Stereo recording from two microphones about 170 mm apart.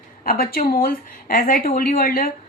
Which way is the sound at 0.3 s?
60° left (ahead or behind).